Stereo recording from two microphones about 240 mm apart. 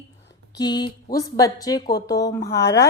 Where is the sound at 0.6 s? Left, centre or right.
Centre.